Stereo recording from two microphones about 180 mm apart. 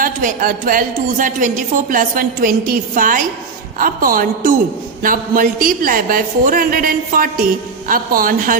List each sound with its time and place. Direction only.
0.0 s a woman's voice: 50° right (ahead or behind)